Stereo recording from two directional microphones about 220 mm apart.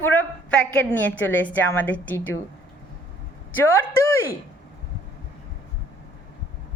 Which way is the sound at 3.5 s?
10° left (ahead or behind).